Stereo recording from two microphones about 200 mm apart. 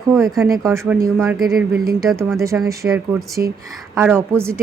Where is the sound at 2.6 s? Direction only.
15° right (ahead or behind).